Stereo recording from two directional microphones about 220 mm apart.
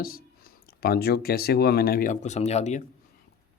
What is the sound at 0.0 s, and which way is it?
Speech, 40° left (ahead or behind).